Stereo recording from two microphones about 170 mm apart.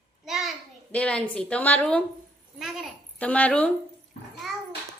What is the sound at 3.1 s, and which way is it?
Speech, 10° left (ahead or behind).